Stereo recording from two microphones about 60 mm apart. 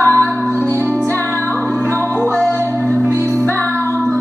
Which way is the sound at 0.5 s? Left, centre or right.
Right.